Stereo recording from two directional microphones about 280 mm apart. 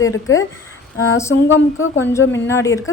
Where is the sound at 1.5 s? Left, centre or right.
Left.